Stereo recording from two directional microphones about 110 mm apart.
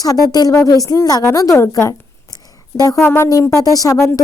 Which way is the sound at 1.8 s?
35° left (ahead or behind).